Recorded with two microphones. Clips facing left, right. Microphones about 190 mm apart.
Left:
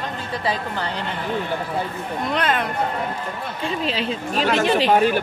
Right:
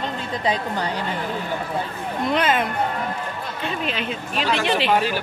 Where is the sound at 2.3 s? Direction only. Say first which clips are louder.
Right 1 dB; 5° right (ahead or behind).